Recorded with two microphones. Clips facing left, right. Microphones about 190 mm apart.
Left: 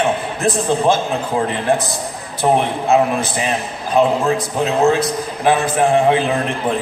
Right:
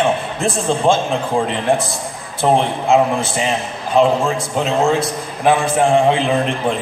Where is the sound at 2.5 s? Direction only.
25° right (ahead or behind).